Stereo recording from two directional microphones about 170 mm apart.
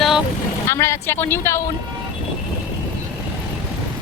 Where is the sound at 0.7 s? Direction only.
15° left (ahead or behind).